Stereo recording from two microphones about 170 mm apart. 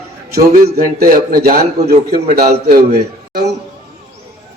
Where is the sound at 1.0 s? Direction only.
55° right (ahead or behind).